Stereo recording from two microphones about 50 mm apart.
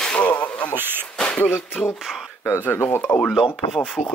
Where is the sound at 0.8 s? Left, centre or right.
Right.